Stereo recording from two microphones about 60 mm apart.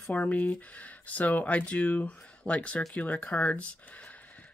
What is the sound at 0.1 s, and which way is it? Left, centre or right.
Speech, left.